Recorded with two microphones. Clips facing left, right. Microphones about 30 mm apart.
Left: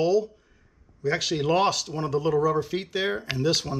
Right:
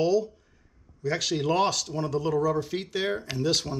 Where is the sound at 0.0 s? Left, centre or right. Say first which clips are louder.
Left 1 dB; centre.